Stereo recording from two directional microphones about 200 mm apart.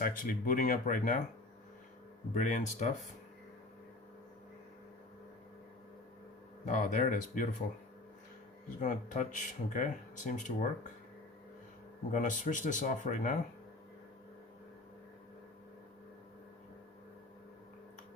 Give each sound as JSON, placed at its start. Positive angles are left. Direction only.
{"t": 0.0, "sound": "speech", "side_deg": 45}
{"t": 2.3, "sound": "speech", "side_deg": 40}
{"t": 6.7, "sound": "speech", "side_deg": 45}
{"t": 8.8, "sound": "speech", "side_deg": 40}
{"t": 12.1, "sound": "speech", "side_deg": 40}